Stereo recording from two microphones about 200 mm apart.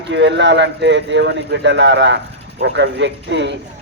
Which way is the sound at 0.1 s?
60° right (ahead or behind).